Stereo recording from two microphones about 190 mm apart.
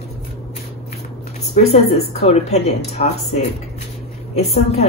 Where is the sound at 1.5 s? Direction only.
35° left (ahead or behind).